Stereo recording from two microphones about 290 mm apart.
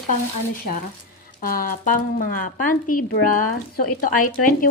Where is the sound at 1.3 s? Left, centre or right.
Left.